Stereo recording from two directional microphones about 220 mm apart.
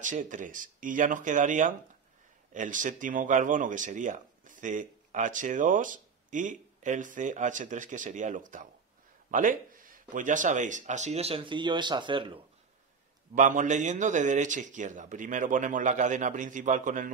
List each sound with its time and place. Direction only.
0.0 s speech: 35° right (ahead or behind)
13.3 s speech: 35° right (ahead or behind)